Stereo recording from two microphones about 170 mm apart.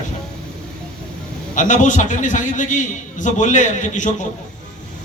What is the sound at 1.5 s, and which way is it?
A man's voice, 45° left (ahead or behind).